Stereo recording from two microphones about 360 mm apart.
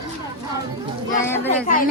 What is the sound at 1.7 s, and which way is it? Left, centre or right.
Speech, left.